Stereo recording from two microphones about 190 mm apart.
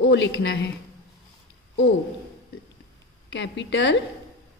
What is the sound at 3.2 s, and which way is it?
Speech, 75° left (ahead or behind).